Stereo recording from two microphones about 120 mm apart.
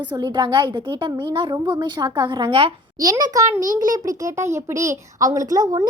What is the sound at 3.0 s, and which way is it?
Speech, 35° right (ahead or behind).